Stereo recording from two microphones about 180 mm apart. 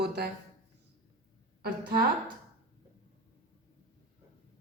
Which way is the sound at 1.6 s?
60° right (ahead or behind).